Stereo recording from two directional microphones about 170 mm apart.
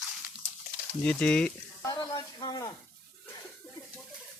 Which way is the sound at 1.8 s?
25° left (ahead or behind).